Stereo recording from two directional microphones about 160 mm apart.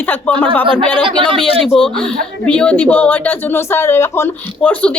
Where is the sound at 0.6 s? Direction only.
30° right (ahead or behind).